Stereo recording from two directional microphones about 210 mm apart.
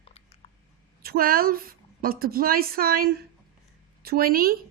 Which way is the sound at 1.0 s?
45° right (ahead or behind).